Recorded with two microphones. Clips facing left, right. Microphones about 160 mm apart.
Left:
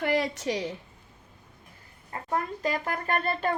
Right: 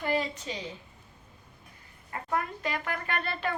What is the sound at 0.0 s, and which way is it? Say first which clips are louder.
Speech: left 4 dB; 75° left (ahead or behind).